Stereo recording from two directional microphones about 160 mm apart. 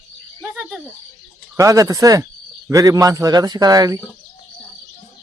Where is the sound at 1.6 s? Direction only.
20° right (ahead or behind).